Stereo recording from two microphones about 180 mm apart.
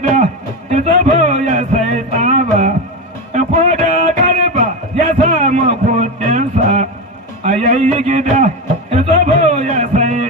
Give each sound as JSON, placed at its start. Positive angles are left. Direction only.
{"t": 0.1, "sound": "music", "side_deg": -40}
{"t": 3.3, "sound": "a sound", "side_deg": -40}
{"t": 8.9, "sound": "music", "side_deg": -40}